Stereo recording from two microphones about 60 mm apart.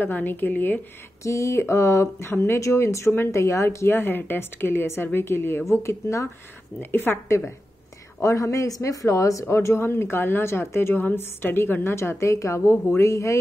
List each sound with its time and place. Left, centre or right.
0.0 s a woman's voice: left
1.2 s a woman's voice: left
2.3 s a woman's voice: left
2.6 s a woman's voice: left
5.7 s a woman's voice: left
6.8 s a woman's voice: left
7.2 s a woman's voice: left
9.5 s a woman's voice: left